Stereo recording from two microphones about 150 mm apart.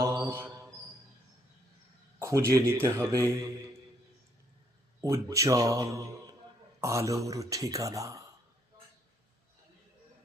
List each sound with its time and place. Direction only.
0.0 s mantra: 20° right (ahead or behind)
2.1 s speech: 20° right (ahead or behind)
4.9 s speech: 20° right (ahead or behind)